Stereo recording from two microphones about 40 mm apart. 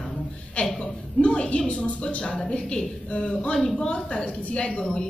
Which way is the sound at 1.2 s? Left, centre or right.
Left.